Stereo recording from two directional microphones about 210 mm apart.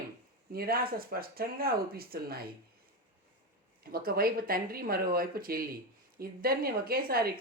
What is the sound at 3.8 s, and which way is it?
Speech, 45° right (ahead or behind).